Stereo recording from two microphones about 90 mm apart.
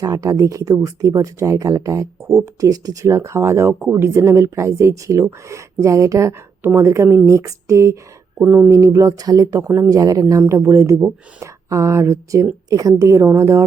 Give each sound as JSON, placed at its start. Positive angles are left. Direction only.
{"t": 0.0, "sound": "speech", "side_deg": -40}
{"t": 8.4, "sound": "speech", "side_deg": -15}
{"t": 8.7, "sound": "speech", "side_deg": -35}